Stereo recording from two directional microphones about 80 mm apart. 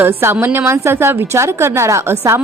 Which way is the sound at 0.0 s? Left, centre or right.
Right.